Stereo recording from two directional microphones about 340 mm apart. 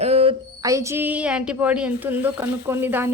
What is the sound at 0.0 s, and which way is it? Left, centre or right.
Speech, centre.